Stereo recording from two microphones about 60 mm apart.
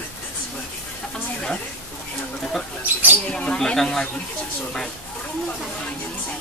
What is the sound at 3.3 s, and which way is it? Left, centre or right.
Speech, centre.